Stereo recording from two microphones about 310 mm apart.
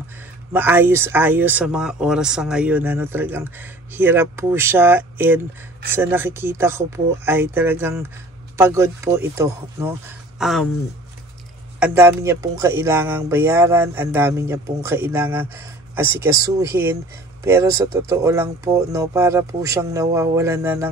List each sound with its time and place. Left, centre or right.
0.5 s speech: centre
11.8 s speech: centre